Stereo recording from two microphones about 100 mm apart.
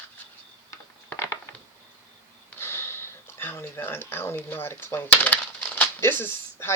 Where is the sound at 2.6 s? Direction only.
25° left (ahead or behind).